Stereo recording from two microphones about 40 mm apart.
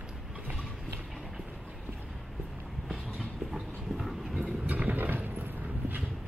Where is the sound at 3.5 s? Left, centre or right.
Centre.